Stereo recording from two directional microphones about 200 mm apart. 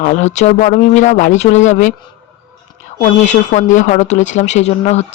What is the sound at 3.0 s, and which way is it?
Speech, 35° left (ahead or behind).